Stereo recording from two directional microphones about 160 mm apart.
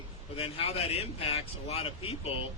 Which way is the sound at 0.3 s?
35° left (ahead or behind).